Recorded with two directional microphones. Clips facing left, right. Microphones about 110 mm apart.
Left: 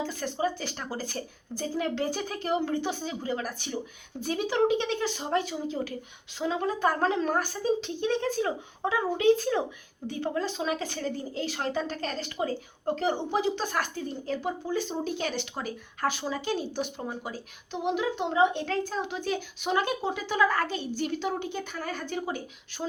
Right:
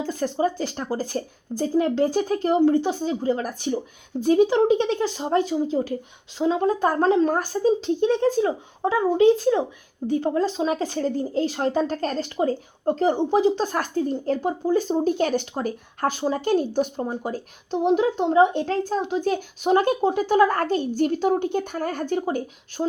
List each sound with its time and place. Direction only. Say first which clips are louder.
0.1 s speech: right 6 dB; 35° right (ahead or behind)
22.8 s speech: right 8 dB; 20° right (ahead or behind)